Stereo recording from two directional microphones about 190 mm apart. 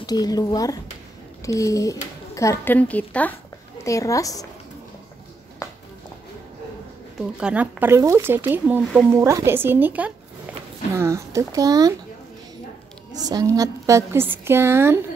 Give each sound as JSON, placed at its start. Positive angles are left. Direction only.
{"t": 0.0, "sound": "a woman's voice", "side_deg": 20}
{"t": 5.6, "sound": "a sound", "side_deg": 15}
{"t": 7.2, "sound": "speech", "side_deg": -5}
{"t": 13.3, "sound": "speech", "side_deg": -20}